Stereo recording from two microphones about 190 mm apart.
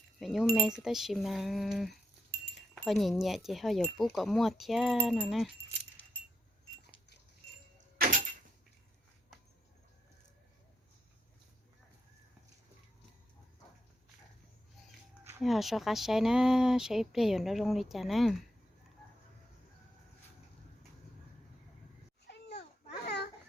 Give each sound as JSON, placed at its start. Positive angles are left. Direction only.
{"t": 0.2, "sound": "speech", "side_deg": 0}
{"t": 7.9, "sound": "door", "side_deg": -50}
{"t": 15.2, "sound": "a sound", "side_deg": -10}
{"t": 15.4, "sound": "speech", "side_deg": 0}
{"t": 22.3, "sound": "babbling", "side_deg": 60}
{"t": 23.0, "sound": "a sound", "side_deg": 60}